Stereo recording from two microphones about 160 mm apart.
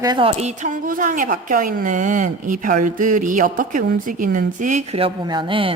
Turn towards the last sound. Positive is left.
turn(degrees=-30)  # may be behind; listen again after turning